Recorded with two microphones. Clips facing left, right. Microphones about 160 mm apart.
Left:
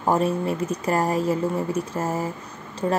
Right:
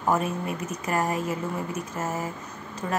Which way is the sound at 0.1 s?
30° left (ahead or behind).